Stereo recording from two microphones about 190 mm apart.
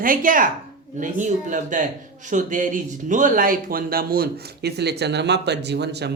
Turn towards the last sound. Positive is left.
turn(degrees=-60)  # may be behind; listen again after turning